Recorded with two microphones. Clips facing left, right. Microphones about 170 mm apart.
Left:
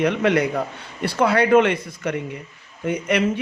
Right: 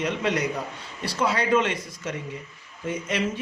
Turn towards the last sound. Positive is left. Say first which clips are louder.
# left 6 dB
turn(degrees=65)  # may be behind; listen again after turning